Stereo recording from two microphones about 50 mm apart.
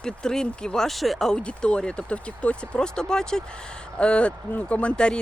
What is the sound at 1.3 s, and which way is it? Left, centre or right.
Speech, left.